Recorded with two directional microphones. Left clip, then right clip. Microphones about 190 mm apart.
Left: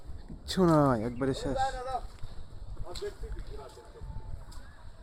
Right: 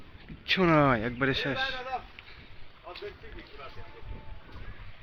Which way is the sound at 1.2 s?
15° left (ahead or behind).